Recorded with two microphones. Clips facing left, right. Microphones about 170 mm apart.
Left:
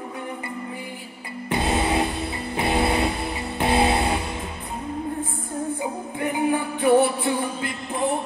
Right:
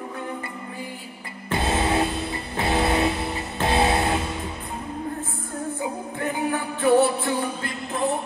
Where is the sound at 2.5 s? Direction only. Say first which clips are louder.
Even; 20° left (ahead or behind).